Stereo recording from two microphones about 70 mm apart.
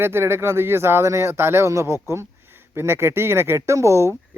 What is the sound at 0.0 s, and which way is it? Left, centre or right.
Speech, right.